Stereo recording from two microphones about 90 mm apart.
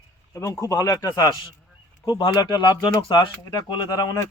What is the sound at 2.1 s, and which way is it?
Speech, 60° left (ahead or behind).